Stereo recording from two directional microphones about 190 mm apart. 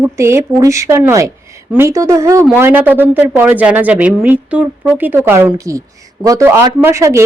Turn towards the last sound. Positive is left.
turn(degrees=-15)  # may be behind; listen again after turning